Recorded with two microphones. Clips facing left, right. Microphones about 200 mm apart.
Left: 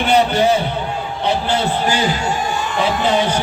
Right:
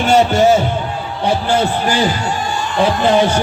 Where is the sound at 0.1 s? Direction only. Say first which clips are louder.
Right 3 dB; 45° right (ahead or behind).